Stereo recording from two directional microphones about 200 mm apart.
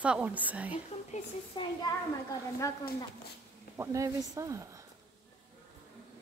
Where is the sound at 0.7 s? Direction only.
30° left (ahead or behind).